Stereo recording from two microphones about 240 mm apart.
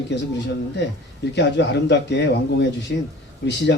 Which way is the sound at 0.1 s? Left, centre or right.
Left.